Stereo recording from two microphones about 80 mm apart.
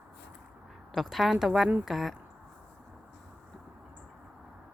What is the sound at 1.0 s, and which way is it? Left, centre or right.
Speech, centre.